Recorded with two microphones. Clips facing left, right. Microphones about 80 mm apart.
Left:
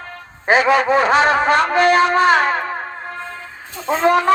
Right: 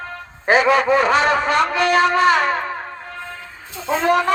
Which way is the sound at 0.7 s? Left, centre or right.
Left.